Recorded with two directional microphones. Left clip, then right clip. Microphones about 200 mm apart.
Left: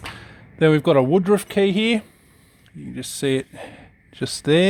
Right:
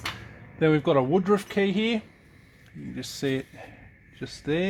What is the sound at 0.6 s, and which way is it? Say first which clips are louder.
A man's voice: left 6 dB; 50° left (ahead or behind).